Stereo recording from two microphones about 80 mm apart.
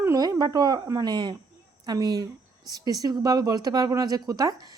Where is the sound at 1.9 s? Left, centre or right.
Right.